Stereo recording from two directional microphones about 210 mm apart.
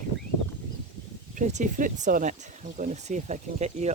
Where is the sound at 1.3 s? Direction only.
35° right (ahead or behind).